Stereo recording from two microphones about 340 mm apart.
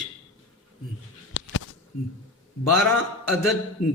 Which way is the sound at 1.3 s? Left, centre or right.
Left.